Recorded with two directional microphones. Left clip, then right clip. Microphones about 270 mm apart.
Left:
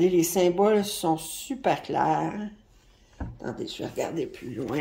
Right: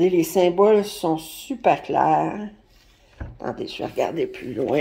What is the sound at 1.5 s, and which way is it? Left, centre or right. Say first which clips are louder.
Speech: right 7 dB; centre.